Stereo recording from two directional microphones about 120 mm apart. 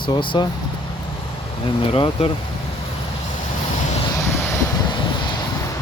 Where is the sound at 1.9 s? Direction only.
45° left (ahead or behind).